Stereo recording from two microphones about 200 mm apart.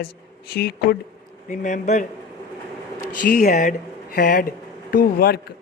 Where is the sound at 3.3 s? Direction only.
45° left (ahead or behind).